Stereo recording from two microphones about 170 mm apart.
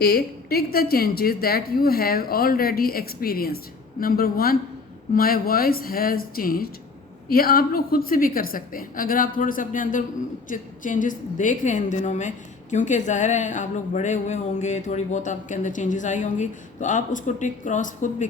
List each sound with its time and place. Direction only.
0.0 s a woman's voice: 65° left (ahead or behind); by 18.3 s 50° left (ahead or behind)